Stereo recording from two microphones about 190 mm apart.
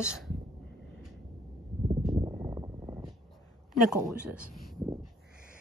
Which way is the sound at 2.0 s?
20° right (ahead or behind).